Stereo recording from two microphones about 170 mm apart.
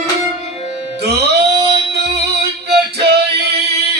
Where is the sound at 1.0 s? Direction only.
75° right (ahead or behind).